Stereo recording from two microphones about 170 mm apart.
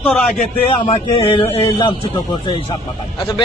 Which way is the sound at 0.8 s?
35° left (ahead or behind).